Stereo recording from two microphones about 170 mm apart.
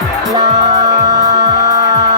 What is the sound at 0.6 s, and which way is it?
Music, 25° right (ahead or behind).